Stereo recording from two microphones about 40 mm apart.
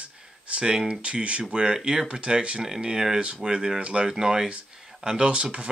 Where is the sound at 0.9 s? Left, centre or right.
Right.